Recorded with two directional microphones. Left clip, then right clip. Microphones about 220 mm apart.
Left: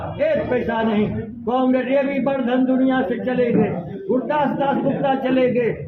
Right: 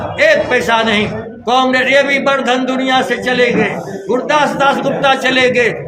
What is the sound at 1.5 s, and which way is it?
A man's voice, 50° right (ahead or behind).